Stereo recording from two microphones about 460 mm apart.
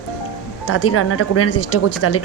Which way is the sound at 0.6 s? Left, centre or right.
Left.